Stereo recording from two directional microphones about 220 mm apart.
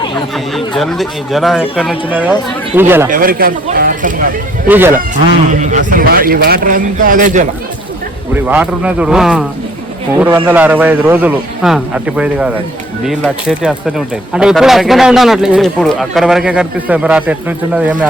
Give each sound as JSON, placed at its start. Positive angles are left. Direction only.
{"t": 0.3, "sound": "a man's voice", "side_deg": 0}
{"t": 3.1, "sound": "a man's voice", "side_deg": -40}
{"t": 4.7, "sound": "a man's voice", "side_deg": -10}
{"t": 5.5, "sound": "a man's voice", "side_deg": -35}
{"t": 8.4, "sound": "a man's voice", "side_deg": -5}